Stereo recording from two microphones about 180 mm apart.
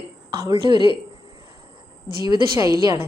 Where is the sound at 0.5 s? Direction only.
25° right (ahead or behind).